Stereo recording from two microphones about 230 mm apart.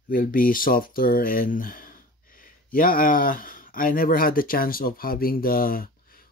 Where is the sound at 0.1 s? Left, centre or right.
Left.